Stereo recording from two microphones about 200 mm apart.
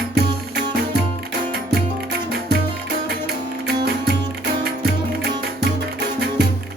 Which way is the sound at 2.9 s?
50° right (ahead or behind).